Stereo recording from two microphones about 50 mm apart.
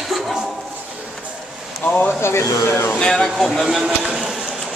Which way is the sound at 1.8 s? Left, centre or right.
Left.